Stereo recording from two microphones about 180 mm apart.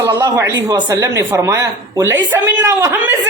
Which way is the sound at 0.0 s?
15° right (ahead or behind).